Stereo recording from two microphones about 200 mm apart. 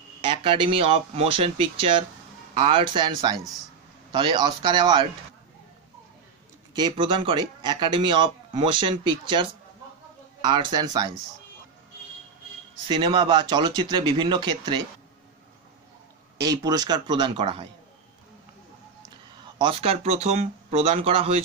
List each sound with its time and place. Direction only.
0.2 s speech: 25° right (ahead or behind)
6.7 s speech: 20° right (ahead or behind)
10.5 s speech: 20° right (ahead or behind)
12.8 s speech: 25° right (ahead or behind)
16.3 s speech: 20° right (ahead or behind)
19.4 s speech: 25° right (ahead or behind)